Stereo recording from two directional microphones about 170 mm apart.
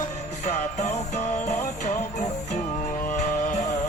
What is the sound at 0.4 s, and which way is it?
Music, 40° left (ahead or behind).